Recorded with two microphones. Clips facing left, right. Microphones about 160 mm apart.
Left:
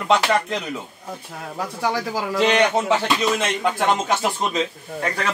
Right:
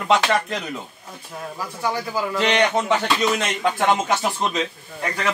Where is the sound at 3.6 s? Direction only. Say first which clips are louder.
Right 2 dB; 5° left (ahead or behind).